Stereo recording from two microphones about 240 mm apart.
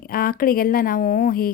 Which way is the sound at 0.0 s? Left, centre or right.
Left.